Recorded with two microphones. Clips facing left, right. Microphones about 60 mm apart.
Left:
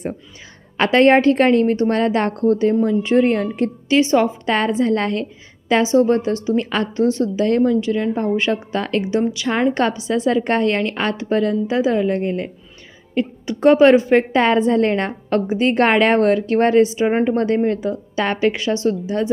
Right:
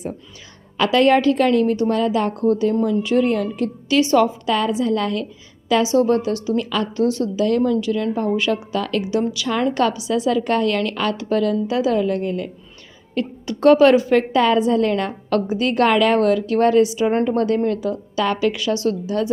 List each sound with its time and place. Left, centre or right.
0.8 s a woman's voice: left
2.5 s a woman's voice: left
4.5 s a woman's voice: left
17.1 s a woman's voice: centre
17.3 s a woman's voice: left